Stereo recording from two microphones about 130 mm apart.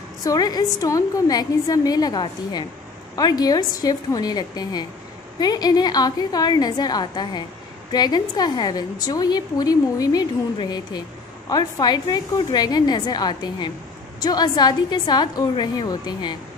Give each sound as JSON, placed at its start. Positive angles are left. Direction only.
{"t": 0.2, "sound": "a woman's voice", "side_deg": 30}